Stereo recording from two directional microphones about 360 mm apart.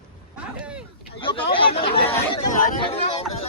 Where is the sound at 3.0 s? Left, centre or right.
Centre.